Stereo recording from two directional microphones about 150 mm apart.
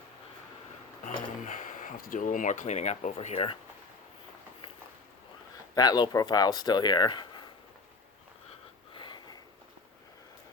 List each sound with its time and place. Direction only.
1.0 s speech: 55° left (ahead or behind)
5.7 s speech: 25° left (ahead or behind)
9.0 s a sound: 30° left (ahead or behind)